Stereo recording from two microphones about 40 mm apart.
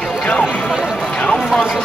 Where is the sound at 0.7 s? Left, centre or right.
Centre.